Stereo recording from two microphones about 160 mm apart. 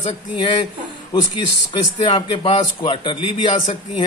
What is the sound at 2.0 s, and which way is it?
A man's voice, 30° left (ahead or behind).